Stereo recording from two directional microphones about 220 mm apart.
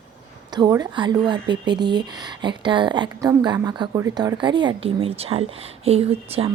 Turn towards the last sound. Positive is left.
turn(degrees=-25)  # may be behind; listen again after turning